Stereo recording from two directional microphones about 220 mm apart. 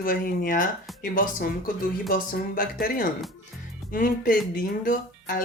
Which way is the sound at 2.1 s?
40° left (ahead or behind).